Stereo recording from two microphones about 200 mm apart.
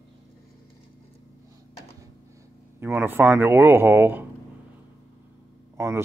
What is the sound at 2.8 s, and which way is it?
A man's voice, 10° right (ahead or behind).